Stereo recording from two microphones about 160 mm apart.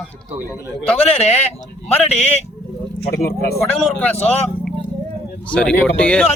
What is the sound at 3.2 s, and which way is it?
Speech, 80° left.